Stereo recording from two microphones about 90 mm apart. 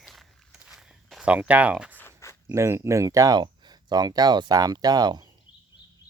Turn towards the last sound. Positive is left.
turn(degrees=-50)  # may be behind; listen again after turning